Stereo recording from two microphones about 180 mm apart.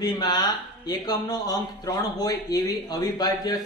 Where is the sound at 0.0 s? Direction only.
25° left (ahead or behind).